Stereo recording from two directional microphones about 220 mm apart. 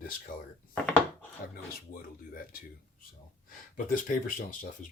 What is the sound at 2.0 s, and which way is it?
Speech, 40° left (ahead or behind).